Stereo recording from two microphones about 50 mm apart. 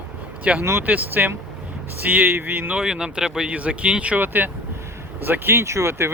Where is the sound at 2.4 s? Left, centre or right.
Right.